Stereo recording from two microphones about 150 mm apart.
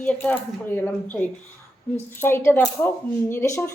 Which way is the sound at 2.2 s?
15° left (ahead or behind).